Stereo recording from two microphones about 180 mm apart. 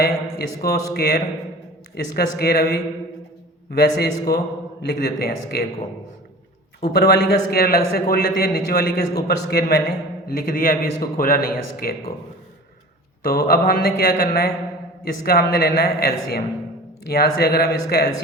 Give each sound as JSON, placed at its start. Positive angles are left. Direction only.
{"t": 0.0, "sound": "a man's voice", "side_deg": 60}
{"t": 6.8, "sound": "a man's voice", "side_deg": 60}
{"t": 13.2, "sound": "a man's voice", "side_deg": 55}